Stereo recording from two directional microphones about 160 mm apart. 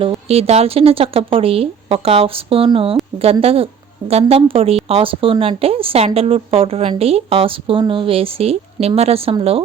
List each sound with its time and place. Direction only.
0.0 s speech: 35° right (ahead or behind)